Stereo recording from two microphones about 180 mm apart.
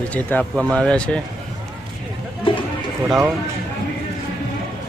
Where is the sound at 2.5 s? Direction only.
30° left (ahead or behind).